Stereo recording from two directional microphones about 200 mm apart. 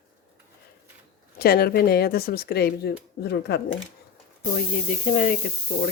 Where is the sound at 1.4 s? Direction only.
50° left (ahead or behind).